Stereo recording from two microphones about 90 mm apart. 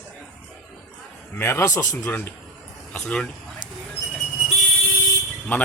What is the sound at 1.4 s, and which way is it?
Speech, 30° left (ahead or behind).